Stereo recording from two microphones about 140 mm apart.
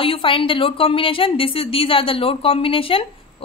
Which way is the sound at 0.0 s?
40° left (ahead or behind).